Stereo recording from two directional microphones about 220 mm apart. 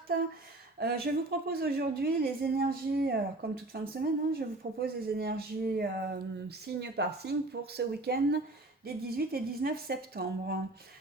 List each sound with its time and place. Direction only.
0.8 s speech: 45° right (ahead or behind)